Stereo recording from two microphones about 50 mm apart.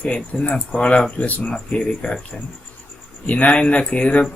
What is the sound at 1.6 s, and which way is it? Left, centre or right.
Speech, centre.